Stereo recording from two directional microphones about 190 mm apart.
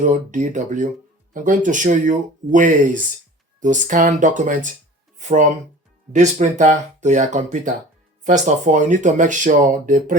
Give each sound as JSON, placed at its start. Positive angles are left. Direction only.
{"t": 0.0, "sound": "speech", "side_deg": -40}